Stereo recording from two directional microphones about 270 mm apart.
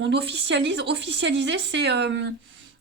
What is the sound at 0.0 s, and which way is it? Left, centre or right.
Speech, right.